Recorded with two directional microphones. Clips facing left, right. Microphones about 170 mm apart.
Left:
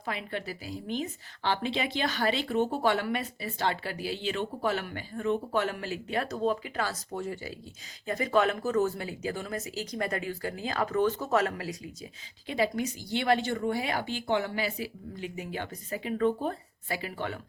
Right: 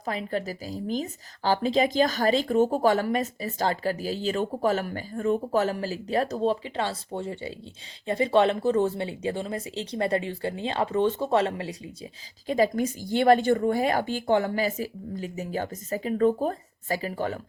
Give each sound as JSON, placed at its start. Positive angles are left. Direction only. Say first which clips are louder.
{"t": 0.0, "sound": "speech", "louder": "right 6 dB", "side_deg": -40}
{"t": 12.5, "sound": "speech", "louder": "right 5 dB", "side_deg": -45}